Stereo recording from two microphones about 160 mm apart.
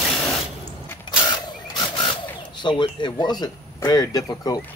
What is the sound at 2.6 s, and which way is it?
Speech, 30° left (ahead or behind).